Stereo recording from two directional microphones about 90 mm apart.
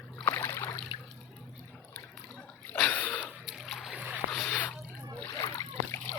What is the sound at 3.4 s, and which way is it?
Splash, 5° right (ahead or behind).